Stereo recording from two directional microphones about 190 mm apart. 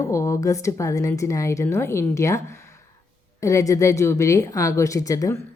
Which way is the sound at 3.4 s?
15° left (ahead or behind).